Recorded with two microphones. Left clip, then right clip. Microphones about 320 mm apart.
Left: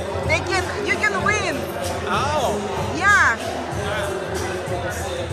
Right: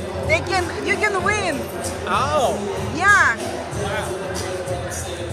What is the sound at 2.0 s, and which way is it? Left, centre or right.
Music, right.